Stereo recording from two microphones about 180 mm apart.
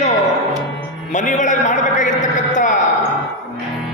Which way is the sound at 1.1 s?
45° left (ahead or behind).